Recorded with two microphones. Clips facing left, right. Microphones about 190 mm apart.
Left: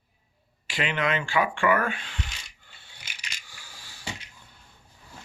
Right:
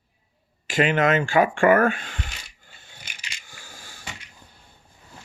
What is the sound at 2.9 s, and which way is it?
Crushing, 50° right (ahead or behind).